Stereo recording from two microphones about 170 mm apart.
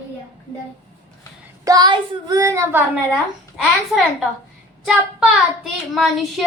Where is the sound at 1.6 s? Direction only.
20° right (ahead or behind).